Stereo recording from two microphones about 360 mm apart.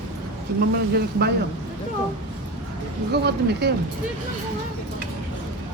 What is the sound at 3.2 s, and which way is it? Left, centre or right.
Speech, right.